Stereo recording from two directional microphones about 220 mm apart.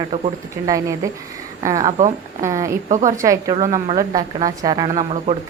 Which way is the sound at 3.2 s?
15° right (ahead or behind).